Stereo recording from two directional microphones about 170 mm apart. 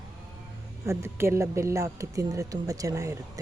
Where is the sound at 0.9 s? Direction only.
15° right (ahead or behind).